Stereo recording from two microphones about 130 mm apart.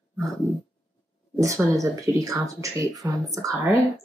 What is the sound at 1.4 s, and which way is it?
Speech, 25° right (ahead or behind).